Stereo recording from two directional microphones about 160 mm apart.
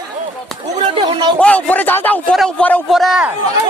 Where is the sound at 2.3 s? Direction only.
Centre (ahead or behind).